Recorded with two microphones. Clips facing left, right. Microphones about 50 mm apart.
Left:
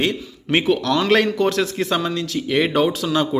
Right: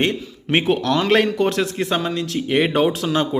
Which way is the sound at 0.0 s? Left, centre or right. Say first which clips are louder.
Right 1 dB; right.